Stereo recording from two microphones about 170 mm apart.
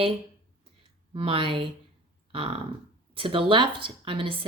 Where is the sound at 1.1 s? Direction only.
30° right (ahead or behind).